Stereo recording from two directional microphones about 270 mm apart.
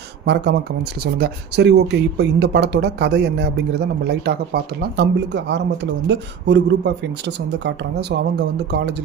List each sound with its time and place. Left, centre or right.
0.2 s speech: right